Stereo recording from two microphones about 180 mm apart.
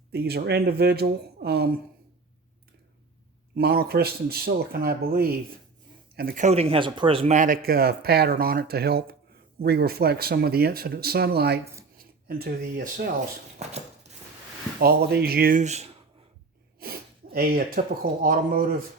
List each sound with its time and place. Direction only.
0.1 s speech: 65° right (ahead or behind)
3.5 s speech: 60° right (ahead or behind)
13.6 s a sound: 35° right (ahead or behind)
14.8 s speech: 55° right (ahead or behind); by 16.0 s 35° right (ahead or behind)
16.8 s sneeze: 55° right (ahead or behind)
17.3 s speech: 55° right (ahead or behind)